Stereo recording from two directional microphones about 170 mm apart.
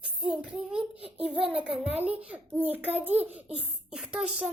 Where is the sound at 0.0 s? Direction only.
5° right (ahead or behind).